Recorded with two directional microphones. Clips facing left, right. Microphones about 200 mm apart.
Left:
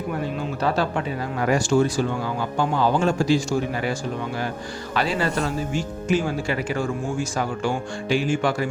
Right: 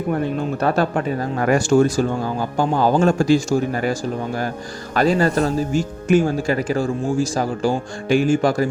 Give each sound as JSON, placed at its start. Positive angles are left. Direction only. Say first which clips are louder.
{"t": 0.6, "sound": "speech", "louder": "right 3 dB", "side_deg": -50}
{"t": 4.9, "sound": "speech", "louder": "right 7 dB", "side_deg": -45}